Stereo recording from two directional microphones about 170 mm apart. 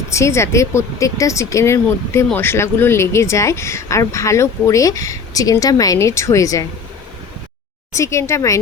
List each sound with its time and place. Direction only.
0.1 s speech: 15° left (ahead or behind)
7.9 s speech: 15° left (ahead or behind)